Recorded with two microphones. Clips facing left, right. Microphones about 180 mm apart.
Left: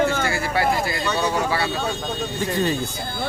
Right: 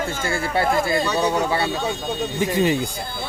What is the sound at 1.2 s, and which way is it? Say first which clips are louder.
Speech: right 2 dB; 20° right (ahead or behind).